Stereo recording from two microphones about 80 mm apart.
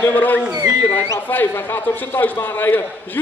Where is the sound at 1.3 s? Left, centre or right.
Left.